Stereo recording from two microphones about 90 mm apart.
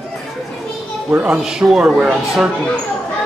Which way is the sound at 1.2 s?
10° right (ahead or behind).